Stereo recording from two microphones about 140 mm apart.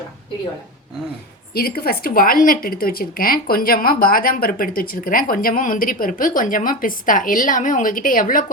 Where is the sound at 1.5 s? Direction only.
90° left.